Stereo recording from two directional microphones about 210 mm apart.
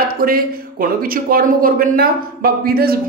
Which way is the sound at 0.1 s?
45° right (ahead or behind).